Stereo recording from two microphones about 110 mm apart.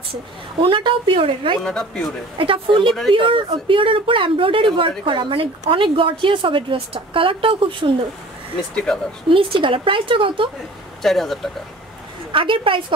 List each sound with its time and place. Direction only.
0.6 s a woman's voice: 50° right (ahead or behind)
1.6 s speech: 5° left (ahead or behind)
2.3 s a woman's voice: 55° right (ahead or behind)
9.3 s a woman's voice: 50° right (ahead or behind)
11.0 s speech: centre (ahead or behind)
12.3 s a woman's voice: 50° right (ahead or behind)